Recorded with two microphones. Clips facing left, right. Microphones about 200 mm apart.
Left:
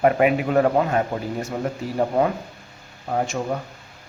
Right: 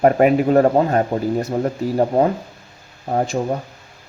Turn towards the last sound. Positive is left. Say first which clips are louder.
# right 5 dB
turn(degrees=-30)  # may be behind; listen again after turning